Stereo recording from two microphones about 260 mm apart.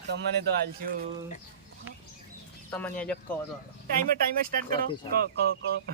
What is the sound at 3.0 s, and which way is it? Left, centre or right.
Mantra, centre.